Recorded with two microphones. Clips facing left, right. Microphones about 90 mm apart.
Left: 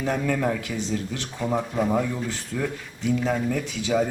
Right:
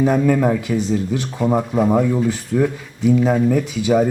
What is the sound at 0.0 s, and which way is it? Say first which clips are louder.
Speech: right 9 dB; 20° right (ahead or behind).